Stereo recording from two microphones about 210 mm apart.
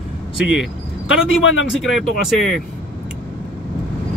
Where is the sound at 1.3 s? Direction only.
70° left (ahead or behind).